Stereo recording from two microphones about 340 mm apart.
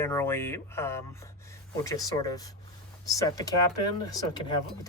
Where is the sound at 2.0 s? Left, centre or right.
Centre.